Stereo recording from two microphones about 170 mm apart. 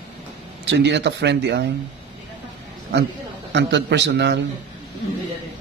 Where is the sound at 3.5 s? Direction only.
90° right.